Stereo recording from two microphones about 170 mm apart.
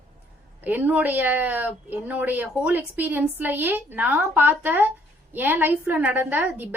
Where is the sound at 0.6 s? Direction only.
10° right (ahead or behind).